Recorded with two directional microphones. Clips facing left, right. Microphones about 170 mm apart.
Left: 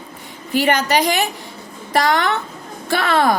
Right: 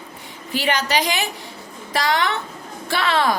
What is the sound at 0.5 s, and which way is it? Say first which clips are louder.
A woman's voice: left 5 dB; 50° left (ahead or behind).